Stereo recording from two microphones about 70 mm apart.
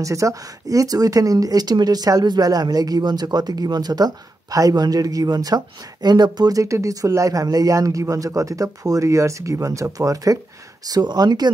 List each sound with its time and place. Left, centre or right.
0.0 s speech: right
6.0 s speech: right
6.6 s speech: right
10.9 s speech: right